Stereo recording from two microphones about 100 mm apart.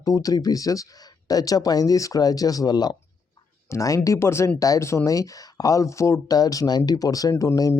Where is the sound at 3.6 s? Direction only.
30° left (ahead or behind).